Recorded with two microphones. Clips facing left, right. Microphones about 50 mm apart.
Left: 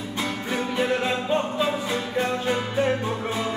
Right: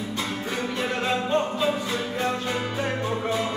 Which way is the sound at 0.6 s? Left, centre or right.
Centre.